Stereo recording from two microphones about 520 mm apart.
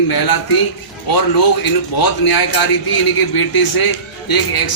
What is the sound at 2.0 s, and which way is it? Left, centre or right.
A man's voice, left.